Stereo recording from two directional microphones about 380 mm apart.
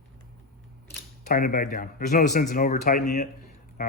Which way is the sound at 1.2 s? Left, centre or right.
Left.